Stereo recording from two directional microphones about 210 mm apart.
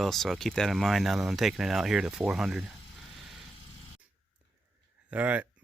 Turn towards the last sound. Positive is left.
turn(degrees=-5)  # may be behind; listen again after turning